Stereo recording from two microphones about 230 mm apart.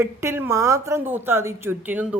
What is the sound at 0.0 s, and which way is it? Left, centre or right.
A woman's voice, centre.